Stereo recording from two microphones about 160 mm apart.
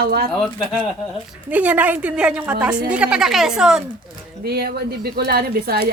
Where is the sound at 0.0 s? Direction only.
70° right (ahead or behind).